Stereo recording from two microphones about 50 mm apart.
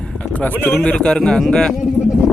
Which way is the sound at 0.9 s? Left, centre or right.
Centre.